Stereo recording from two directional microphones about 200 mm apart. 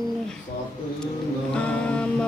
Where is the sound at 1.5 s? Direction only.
5° left (ahead or behind).